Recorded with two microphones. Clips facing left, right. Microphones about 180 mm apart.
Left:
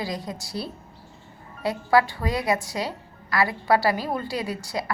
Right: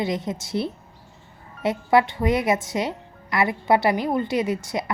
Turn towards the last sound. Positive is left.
turn(degrees=-20)  # may be behind; listen again after turning